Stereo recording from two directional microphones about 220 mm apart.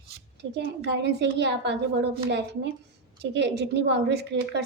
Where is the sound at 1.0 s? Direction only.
50° right (ahead or behind).